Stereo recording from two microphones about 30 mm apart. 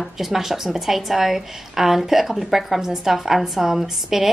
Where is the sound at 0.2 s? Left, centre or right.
Centre.